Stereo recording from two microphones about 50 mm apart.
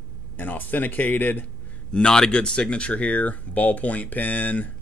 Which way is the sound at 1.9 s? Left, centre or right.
Centre.